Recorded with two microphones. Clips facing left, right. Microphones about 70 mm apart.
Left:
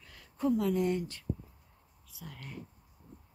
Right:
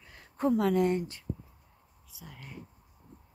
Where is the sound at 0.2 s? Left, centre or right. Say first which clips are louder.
Right 3 dB; right.